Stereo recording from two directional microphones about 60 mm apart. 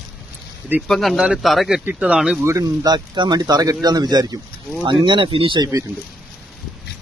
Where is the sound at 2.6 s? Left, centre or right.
Right.